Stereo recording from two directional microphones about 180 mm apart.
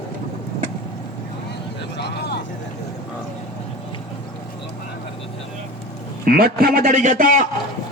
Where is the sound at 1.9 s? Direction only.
65° left (ahead or behind).